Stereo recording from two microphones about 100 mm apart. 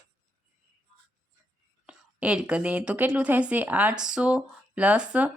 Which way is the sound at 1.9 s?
10° right (ahead or behind).